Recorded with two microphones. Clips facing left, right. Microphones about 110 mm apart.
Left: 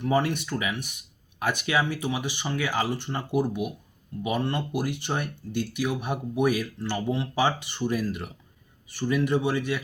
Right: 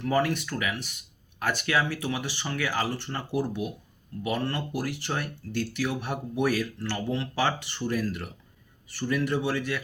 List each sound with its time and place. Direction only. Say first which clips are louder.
0.0 s speech: left 1 dB; 20° left (ahead or behind)